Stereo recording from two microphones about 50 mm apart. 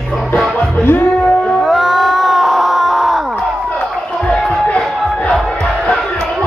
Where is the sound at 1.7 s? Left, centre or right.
Centre.